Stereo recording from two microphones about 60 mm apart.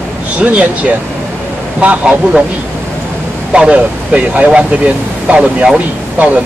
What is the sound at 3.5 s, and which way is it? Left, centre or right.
Speech, centre.